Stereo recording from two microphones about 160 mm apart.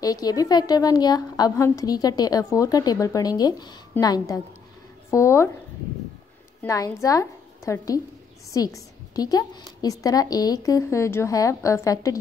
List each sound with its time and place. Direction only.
0.0 s a woman's voice: 25° left (ahead or behind)
6.6 s a woman's voice: 20° left (ahead or behind)